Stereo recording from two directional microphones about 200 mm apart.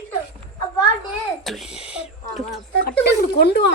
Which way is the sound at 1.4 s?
Centre (ahead or behind).